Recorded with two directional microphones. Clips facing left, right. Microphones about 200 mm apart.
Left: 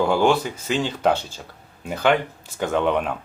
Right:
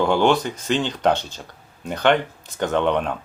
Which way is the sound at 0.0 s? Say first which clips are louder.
Right 1 dB; 5° left (ahead or behind).